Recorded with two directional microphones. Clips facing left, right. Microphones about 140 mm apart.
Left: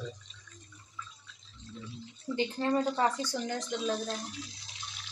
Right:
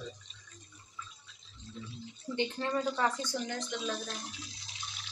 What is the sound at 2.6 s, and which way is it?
Speech, 35° left (ahead or behind).